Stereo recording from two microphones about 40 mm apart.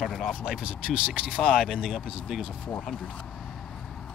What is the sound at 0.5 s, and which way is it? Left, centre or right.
Speech, right.